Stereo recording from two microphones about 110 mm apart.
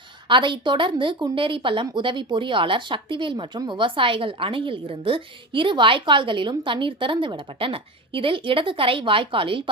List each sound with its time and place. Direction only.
0.3 s speech: 50° right (ahead or behind)